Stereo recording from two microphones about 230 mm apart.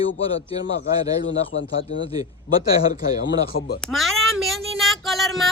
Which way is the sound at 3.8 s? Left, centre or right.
Centre.